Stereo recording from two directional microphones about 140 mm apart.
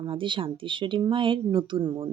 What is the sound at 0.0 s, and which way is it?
Speech, 35° right (ahead or behind).